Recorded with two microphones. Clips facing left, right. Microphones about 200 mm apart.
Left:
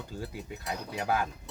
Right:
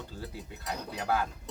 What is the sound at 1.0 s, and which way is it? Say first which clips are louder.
Speech: left 1 dB; 15° left (ahead or behind).